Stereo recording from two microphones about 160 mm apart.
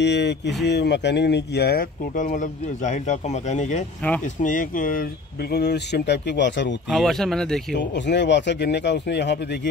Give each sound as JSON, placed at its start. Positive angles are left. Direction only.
{"t": 0.0, "sound": "speech", "side_deg": 90}
{"t": 2.1, "sound": "speech", "side_deg": 55}
{"t": 4.0, "sound": "speech", "side_deg": 10}
{"t": 4.4, "sound": "speech", "side_deg": 55}
{"t": 6.9, "sound": "speech", "side_deg": 0}
{"t": 7.7, "sound": "speech", "side_deg": 90}